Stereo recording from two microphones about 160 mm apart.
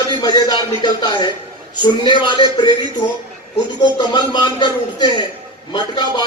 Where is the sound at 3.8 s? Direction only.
30° left (ahead or behind).